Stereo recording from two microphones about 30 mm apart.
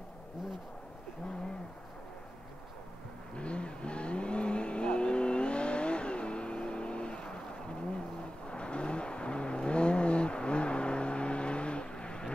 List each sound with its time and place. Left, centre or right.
3.3 s vehicle: left